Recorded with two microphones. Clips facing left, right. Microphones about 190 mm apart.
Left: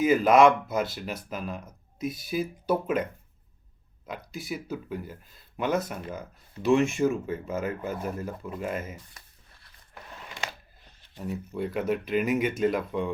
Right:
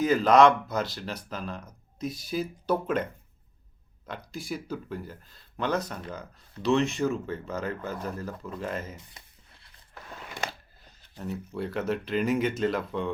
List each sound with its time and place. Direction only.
0.0 s speech: 5° left (ahead or behind)
9.0 s a sound: 20° right (ahead or behind)
11.2 s speech: 5° left (ahead or behind)